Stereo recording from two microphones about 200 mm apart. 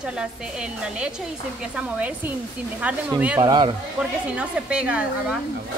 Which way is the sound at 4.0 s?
5° right (ahead or behind).